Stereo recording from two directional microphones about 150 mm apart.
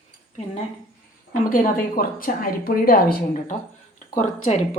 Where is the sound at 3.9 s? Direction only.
55° left (ahead or behind).